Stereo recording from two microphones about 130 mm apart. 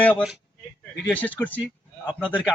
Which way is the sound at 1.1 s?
10° left (ahead or behind).